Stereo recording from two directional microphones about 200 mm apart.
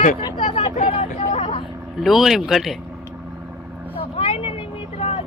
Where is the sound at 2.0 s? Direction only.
Centre (ahead or behind).